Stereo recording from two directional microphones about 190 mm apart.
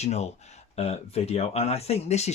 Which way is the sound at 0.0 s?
35° left (ahead or behind).